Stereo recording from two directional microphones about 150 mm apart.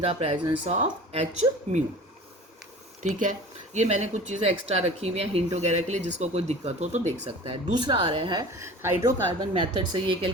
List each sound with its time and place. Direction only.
0.0 s speech: 45° right (ahead or behind)
3.0 s speech: 55° right (ahead or behind); by 9.2 s 15° right (ahead or behind)
9.4 s speech: 35° right (ahead or behind)